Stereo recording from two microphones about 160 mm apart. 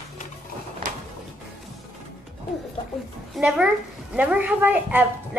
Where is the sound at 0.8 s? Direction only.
55° right (ahead or behind).